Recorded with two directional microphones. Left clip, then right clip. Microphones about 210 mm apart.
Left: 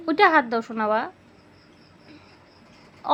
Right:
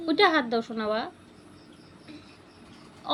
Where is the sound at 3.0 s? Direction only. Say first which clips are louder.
Left 8 dB; 35° left (ahead or behind).